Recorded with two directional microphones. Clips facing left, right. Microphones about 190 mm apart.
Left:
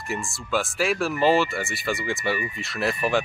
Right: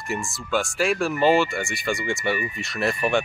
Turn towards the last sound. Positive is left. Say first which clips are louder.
# right 1 dB
turn(degrees=0)  # may be behind; listen again after turning